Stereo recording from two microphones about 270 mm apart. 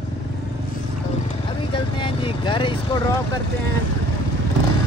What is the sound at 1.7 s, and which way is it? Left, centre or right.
Vehicle, centre.